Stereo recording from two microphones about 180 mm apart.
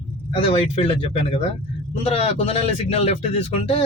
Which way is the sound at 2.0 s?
35° left (ahead or behind).